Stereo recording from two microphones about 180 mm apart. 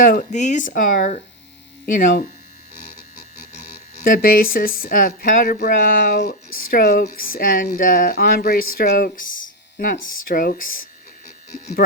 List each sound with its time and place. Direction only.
0.0 s speech: 50° left (ahead or behind)
4.0 s speech: 55° left (ahead or behind)